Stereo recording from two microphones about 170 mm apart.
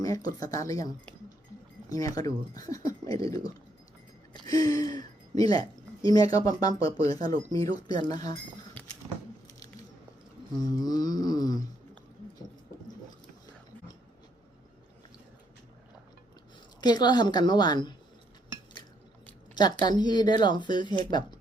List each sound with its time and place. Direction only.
0.0 s speech: 20° left (ahead or behind)
1.9 s speech: 20° left (ahead or behind)
10.6 s speech: 20° left (ahead or behind)
16.8 s speech: 25° left (ahead or behind)
19.5 s speech: 25° left (ahead or behind)